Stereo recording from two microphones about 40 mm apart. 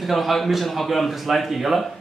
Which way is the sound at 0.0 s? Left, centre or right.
Centre.